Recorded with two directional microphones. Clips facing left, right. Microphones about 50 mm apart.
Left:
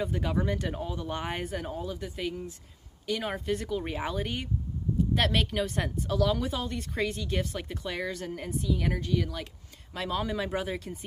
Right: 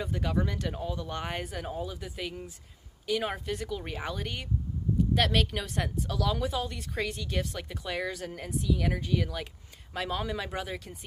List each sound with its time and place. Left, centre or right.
0.0 s speech: centre